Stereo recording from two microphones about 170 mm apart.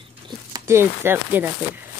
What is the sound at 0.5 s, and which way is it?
Speech, 15° right (ahead or behind).